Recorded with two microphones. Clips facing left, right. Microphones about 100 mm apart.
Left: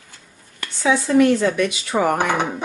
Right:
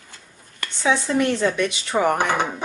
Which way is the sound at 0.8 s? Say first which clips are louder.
Left 2 dB; 25° right (ahead or behind).